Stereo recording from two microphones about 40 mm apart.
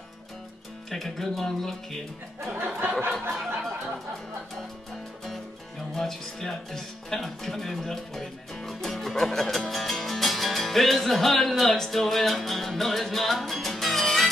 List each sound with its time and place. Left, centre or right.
0.8 s speech: centre
2.4 s a sound: right
5.9 s speech: centre